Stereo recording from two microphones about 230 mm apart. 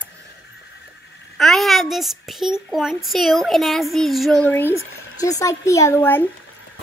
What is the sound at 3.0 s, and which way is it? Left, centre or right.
Speech, centre.